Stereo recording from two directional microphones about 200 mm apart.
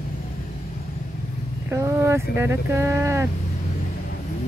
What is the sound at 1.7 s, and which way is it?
Speech, 15° right (ahead or behind).